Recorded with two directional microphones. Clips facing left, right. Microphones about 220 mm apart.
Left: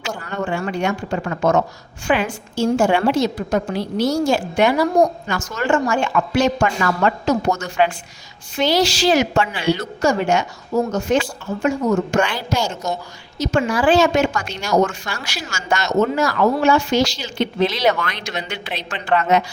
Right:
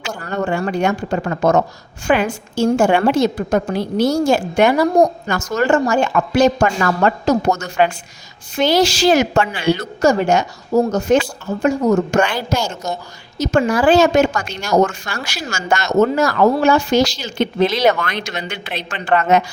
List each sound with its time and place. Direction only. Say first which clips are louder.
0.3 s a woman's voice: right 5 dB; 40° right (ahead or behind)